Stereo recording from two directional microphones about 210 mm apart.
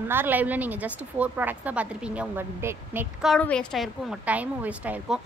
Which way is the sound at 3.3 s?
5° left (ahead or behind).